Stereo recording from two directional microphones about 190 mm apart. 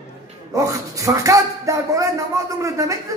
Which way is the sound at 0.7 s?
15° right (ahead or behind).